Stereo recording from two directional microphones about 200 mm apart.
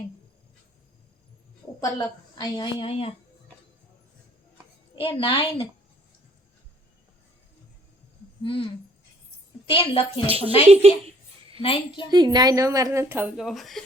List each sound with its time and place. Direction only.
1.8 s a woman's voice: 20° left (ahead or behind)
4.9 s a woman's voice: 25° left (ahead or behind)
8.4 s a woman's voice: 25° left (ahead or behind)
10.2 s speech: 30° right (ahead or behind)
11.6 s a woman's voice: 25° left (ahead or behind)
12.1 s a woman's voice: 20° right (ahead or behind); by 13.8 s centre (ahead or behind)